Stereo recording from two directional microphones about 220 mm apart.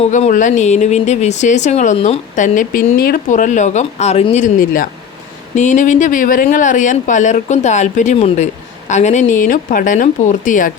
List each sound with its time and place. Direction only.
0.0 s speech: 30° left (ahead or behind)